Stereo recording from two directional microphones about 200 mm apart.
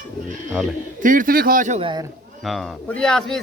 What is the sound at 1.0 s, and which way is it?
Speech, 40° right (ahead or behind).